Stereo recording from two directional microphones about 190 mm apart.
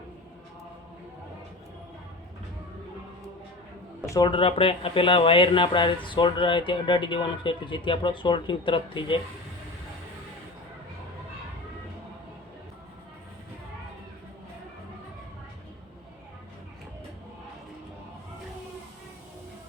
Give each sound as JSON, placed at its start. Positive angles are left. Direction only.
{"t": 4.0, "sound": "speech", "side_deg": 20}